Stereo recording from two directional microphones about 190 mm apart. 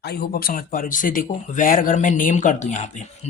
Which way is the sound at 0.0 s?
55° left (ahead or behind).